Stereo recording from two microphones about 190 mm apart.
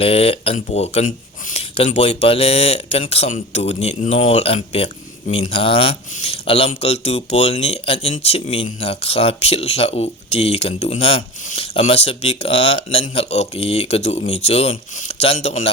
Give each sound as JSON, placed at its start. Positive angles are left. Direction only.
{"t": 0.0, "sound": "speech", "side_deg": 30}